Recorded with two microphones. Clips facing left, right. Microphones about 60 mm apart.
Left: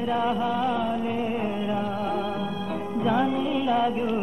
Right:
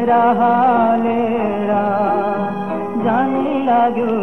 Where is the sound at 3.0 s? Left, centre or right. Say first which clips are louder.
Right 7 dB; right.